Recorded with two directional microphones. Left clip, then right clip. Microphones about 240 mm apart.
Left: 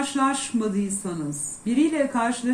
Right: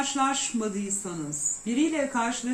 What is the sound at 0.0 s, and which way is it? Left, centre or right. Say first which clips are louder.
Speech: left 2 dB; centre.